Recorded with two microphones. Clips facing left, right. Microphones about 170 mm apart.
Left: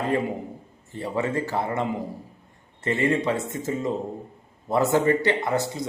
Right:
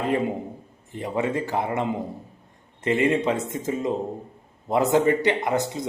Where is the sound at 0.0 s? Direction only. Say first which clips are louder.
Right 1 dB; 15° right (ahead or behind).